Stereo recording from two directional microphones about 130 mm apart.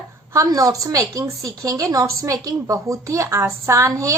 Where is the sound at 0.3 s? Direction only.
25° right (ahead or behind).